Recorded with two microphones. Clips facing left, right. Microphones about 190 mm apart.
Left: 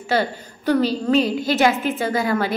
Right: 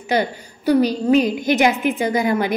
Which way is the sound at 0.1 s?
15° right (ahead or behind).